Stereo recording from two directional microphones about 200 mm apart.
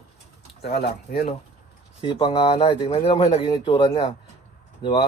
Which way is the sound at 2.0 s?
25° left (ahead or behind).